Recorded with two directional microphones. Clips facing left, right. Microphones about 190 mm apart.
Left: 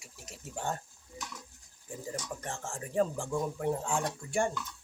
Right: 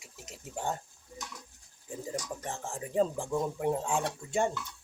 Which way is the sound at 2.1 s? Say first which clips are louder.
Right 1 dB; 15° right (ahead or behind).